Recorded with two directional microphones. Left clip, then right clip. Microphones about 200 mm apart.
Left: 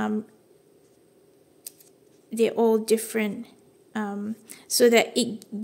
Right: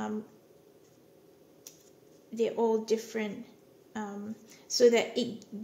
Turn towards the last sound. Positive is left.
turn(degrees=40)  # may be behind; listen again after turning